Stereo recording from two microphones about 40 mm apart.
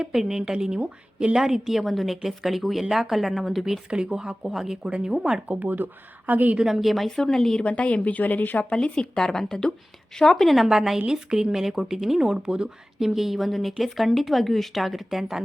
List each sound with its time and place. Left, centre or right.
0.1 s speech: centre; by 1.4 s right
1.4 s speech: centre
1.8 s speech: centre
3.8 s speech: right
4.4 s speech: centre
4.8 s speech: right
5.5 s speech: right
6.7 s speech: centre
7.2 s speech: centre
7.6 s speech: left
8.7 s speech: left
10.4 s speech: centre
10.7 s speech: centre
13.0 s speech: centre